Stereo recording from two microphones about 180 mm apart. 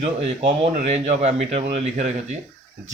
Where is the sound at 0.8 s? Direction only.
35° right (ahead or behind).